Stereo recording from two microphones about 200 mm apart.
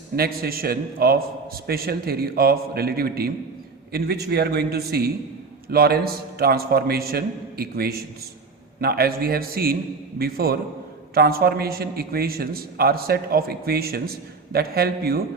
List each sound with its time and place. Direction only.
0.2 s a man's voice: 50° right (ahead or behind)